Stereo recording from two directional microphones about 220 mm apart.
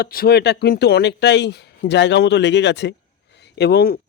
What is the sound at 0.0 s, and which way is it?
Speech, 45° left (ahead or behind).